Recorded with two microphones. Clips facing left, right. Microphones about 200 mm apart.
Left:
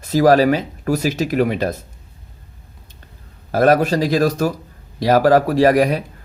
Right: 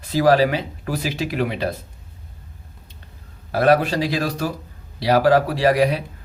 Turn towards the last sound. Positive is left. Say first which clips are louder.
# left 4 dB
turn(degrees=45)  # may be behind; listen again after turning